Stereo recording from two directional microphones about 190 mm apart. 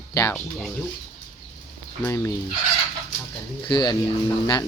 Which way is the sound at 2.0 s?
15° left (ahead or behind).